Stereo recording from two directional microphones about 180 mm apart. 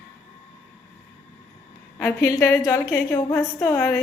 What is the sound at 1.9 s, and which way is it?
A woman's voice, 15° left (ahead or behind).